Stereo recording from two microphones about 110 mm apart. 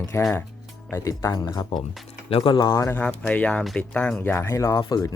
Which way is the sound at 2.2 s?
60° left (ahead or behind).